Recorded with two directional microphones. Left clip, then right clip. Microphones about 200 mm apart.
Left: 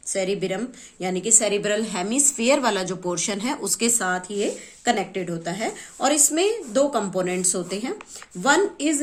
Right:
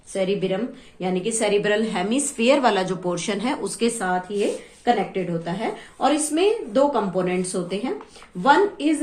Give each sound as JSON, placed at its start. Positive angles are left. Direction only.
{"t": 0.1, "sound": "a woman's voice", "side_deg": 45}